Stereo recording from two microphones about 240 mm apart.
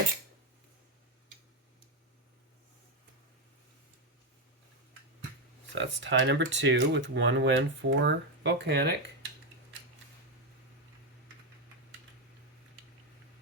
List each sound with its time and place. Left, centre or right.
5.7 s speech: right